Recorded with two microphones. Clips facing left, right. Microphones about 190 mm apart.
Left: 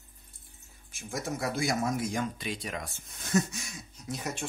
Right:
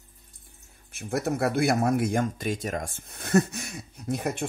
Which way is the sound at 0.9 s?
60° right (ahead or behind).